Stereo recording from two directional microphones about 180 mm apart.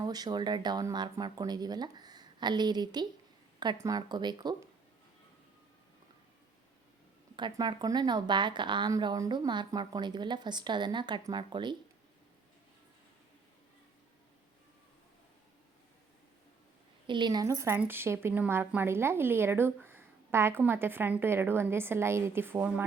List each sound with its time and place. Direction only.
0.0 s speech: 20° right (ahead or behind)
7.3 s speech: 25° right (ahead or behind)
17.1 s speech: 25° right (ahead or behind)